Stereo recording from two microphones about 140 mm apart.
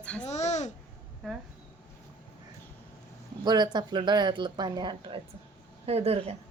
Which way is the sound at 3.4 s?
30° right (ahead or behind).